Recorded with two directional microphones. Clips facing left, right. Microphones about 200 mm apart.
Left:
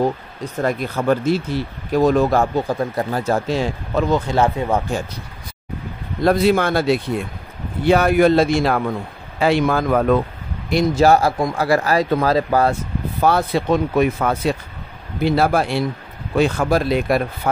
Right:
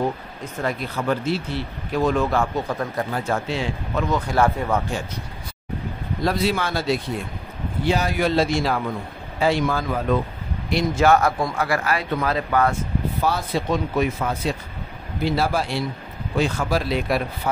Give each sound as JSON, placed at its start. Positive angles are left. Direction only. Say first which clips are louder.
{"t": 0.6, "sound": "speech", "louder": "left 5 dB", "side_deg": 45}
{"t": 4.1, "sound": "speech", "louder": "left 2 dB", "side_deg": 20}
{"t": 6.2, "sound": "speech", "louder": "left 7 dB", "side_deg": 55}
{"t": 10.7, "sound": "speech", "louder": "left 4 dB", "side_deg": 40}
{"t": 11.6, "sound": "speech", "louder": "left 9 dB", "side_deg": 40}
{"t": 13.2, "sound": "speech", "louder": "left 8 dB", "side_deg": 60}